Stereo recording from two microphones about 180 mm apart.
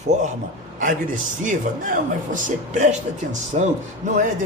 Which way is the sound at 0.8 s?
50° right (ahead or behind).